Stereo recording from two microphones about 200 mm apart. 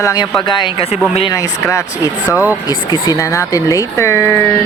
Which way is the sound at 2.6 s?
20° left (ahead or behind).